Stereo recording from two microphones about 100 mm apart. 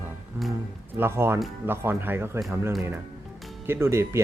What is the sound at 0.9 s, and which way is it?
Speech, 25° right (ahead or behind).